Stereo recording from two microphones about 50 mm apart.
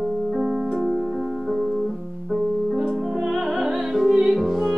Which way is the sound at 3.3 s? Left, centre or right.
Centre.